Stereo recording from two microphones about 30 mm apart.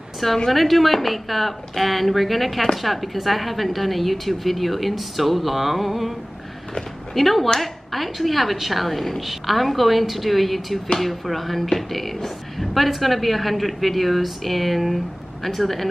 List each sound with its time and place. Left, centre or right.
0.5 s a woman's voice: centre
7.2 s a woman's voice: centre